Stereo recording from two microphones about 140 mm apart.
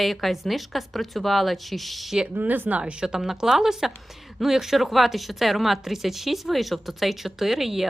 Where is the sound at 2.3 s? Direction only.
15° right (ahead or behind).